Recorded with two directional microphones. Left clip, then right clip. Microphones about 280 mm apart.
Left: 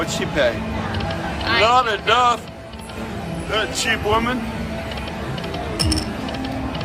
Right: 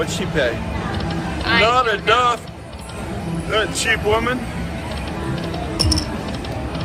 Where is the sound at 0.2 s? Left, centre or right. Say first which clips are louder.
Left 3 dB; left.